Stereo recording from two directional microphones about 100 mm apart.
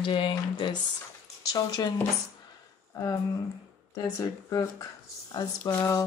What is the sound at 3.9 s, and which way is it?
Speech, 35° left (ahead or behind).